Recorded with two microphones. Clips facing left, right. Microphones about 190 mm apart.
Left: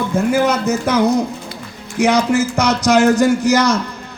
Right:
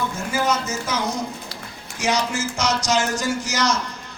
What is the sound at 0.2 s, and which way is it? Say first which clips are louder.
A man's voice: left 9 dB; 60° left (ahead or behind).